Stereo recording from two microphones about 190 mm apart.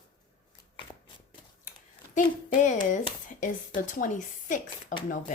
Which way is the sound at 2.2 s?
40° left (ahead or behind).